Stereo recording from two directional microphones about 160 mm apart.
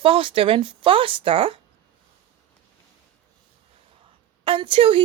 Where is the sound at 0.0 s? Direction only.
35° right (ahead or behind).